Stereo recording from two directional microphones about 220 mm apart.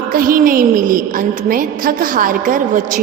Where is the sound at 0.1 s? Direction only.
40° right (ahead or behind).